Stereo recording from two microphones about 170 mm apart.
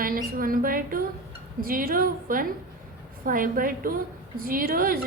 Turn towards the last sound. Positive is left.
turn(degrees=-55)  # may be behind; listen again after turning